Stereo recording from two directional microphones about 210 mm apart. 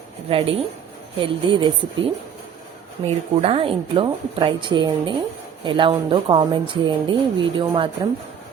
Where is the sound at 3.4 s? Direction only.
25° right (ahead or behind).